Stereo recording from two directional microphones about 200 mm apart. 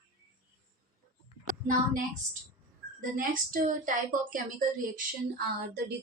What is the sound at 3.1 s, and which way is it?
A woman's voice, 40° right (ahead or behind).